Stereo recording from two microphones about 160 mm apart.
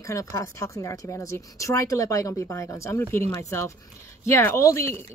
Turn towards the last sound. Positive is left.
turn(degrees=20)  # may be behind; listen again after turning